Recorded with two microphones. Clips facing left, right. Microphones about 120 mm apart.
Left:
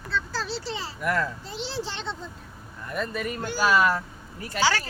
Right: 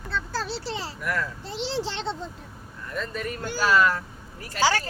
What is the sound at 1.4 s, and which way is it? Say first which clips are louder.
Speech: right 3 dB; 85° right.